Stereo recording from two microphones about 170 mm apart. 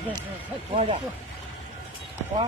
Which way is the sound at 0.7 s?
35° right (ahead or behind).